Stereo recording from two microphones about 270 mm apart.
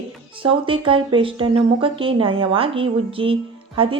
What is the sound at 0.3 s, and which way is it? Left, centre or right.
Speech, centre.